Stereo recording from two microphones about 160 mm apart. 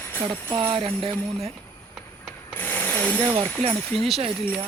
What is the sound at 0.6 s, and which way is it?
Speech, 30° right (ahead or behind).